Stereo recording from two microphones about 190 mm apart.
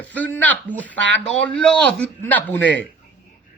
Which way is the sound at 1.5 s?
5° left (ahead or behind).